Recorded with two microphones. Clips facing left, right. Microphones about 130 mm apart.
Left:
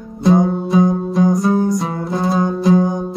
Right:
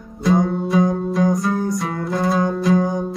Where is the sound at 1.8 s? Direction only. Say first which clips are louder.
Left 2 dB; 30° left (ahead or behind).